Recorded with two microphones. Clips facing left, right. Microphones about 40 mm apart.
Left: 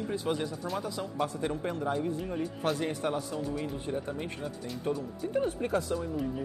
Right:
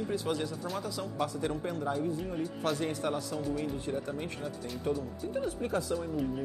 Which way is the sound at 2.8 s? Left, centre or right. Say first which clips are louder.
Left 1 dB; centre.